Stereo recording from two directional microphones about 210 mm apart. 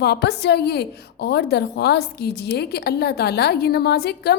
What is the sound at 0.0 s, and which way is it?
A woman's voice, 50° left (ahead or behind).